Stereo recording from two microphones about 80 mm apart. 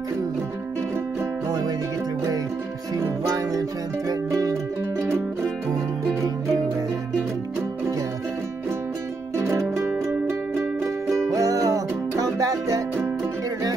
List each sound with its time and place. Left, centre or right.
4.1 s music: right
9.4 s music: right